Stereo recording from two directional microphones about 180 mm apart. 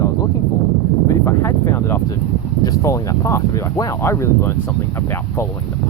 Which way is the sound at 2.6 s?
20° left (ahead or behind).